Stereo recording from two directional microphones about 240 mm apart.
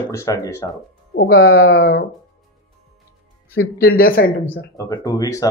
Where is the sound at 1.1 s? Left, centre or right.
Left.